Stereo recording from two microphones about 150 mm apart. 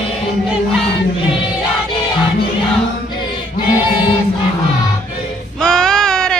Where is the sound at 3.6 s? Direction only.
30° left (ahead or behind).